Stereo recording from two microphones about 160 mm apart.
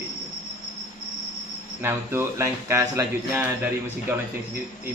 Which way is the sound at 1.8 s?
15° right (ahead or behind).